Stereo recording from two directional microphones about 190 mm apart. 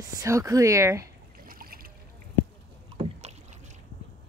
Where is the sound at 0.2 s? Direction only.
15° right (ahead or behind).